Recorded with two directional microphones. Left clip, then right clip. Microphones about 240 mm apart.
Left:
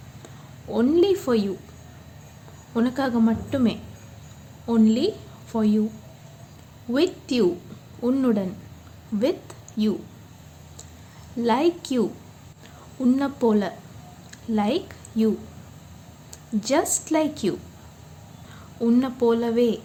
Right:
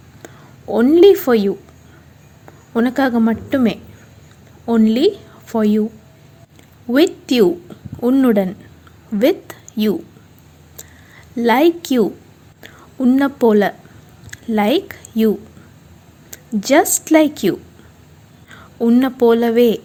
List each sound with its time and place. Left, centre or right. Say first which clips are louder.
0.7 s a woman's voice: right 10 dB; right
2.7 s a woman's voice: right 7 dB; right
6.9 s a woman's voice: right 9 dB; right
11.4 s a woman's voice: right 8 dB; right
16.3 s a woman's voice: right 9 dB; right
18.8 s a woman's voice: right 8 dB; right